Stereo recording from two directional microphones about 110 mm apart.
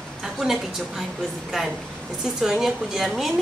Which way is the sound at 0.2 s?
5° right (ahead or behind).